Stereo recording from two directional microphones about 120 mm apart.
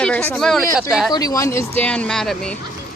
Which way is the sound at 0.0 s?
10° left (ahead or behind).